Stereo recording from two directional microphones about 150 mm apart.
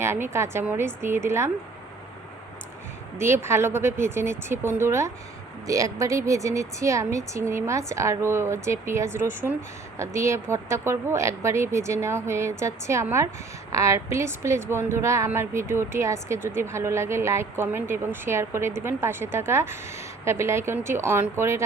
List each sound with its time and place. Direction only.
0.0 s speech: 15° right (ahead or behind)
3.2 s speech: 15° right (ahead or behind)